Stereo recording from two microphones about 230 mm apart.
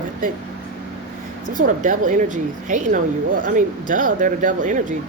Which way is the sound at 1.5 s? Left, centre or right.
Right.